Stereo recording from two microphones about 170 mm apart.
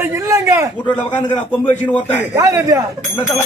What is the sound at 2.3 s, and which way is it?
Speech, 20° right (ahead or behind).